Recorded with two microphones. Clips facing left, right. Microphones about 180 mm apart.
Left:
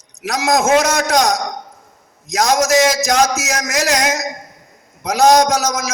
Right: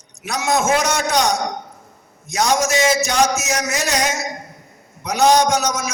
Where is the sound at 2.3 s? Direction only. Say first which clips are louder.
Left 4 dB; 90° left.